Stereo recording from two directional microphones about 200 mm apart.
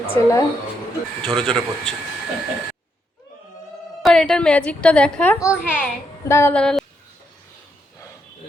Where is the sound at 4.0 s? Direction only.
Centre (ahead or behind).